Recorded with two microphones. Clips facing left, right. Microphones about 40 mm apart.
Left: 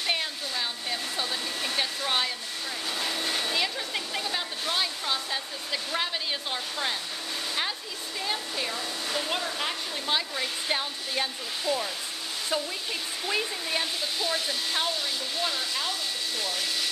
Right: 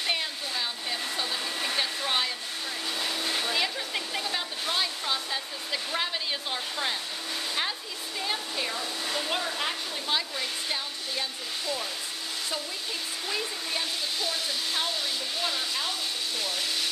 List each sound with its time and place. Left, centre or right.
0.0 s hair dryer: centre
8.2 s hair dryer: centre
10.1 s hair dryer: centre
10.7 s hair dryer: left
13.3 s hair dryer: centre
15.4 s hair dryer: centre